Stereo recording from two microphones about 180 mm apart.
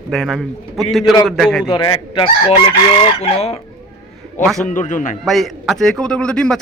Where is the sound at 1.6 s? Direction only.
30° left (ahead or behind).